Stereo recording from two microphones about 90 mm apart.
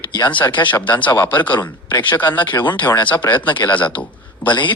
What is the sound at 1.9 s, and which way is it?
Speech, 60° left (ahead or behind).